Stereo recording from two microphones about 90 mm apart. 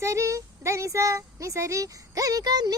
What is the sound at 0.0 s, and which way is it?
Speech, 35° right (ahead or behind).